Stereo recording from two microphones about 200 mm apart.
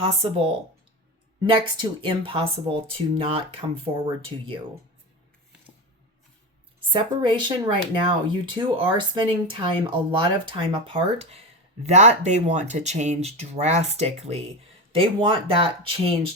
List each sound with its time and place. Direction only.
0.0 s speech: 30° right (ahead or behind)
6.9 s speech: 25° right (ahead or behind)